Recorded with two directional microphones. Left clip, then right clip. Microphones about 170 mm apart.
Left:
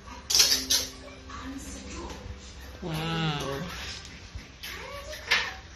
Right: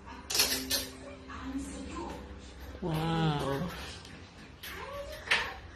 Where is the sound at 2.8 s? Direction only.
30° right (ahead or behind).